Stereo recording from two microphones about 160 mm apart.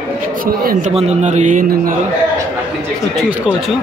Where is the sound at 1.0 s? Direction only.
45° right (ahead or behind).